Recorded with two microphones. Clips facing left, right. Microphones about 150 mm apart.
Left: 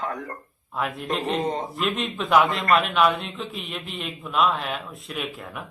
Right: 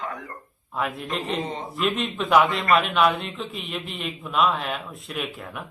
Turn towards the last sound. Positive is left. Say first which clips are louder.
# right 1 dB
turn(degrees=0)  # may be behind; listen again after turning